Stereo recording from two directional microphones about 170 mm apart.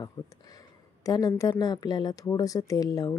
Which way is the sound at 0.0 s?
20° left (ahead or behind).